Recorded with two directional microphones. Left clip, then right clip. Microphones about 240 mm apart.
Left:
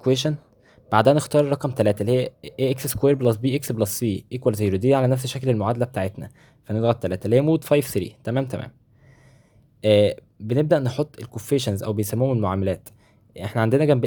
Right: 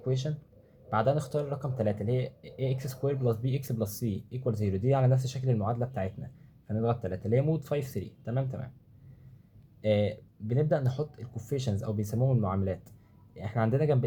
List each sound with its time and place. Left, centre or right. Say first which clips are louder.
0.0 s speech: left 13 dB; left
9.8 s speech: left 11 dB; left